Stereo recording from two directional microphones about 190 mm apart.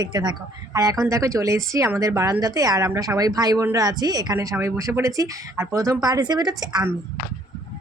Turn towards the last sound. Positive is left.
turn(degrees=-20)  # may be behind; listen again after turning